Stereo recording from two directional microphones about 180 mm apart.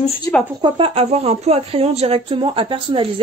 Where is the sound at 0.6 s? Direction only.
30° right (ahead or behind).